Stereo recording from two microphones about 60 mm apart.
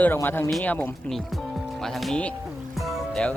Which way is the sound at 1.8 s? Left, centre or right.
Centre.